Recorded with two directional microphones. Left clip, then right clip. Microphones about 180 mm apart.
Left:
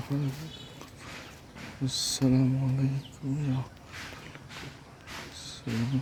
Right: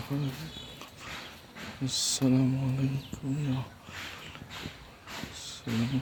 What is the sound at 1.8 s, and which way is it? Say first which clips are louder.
Speech: even; 15° left (ahead or behind).